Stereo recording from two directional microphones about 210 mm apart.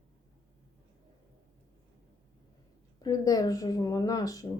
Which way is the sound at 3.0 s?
15° left (ahead or behind).